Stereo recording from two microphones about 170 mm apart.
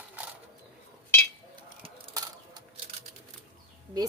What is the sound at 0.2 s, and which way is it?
Bird, 10° right (ahead or behind).